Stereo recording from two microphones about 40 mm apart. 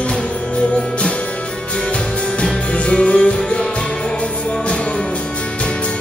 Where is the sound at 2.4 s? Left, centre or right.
Left.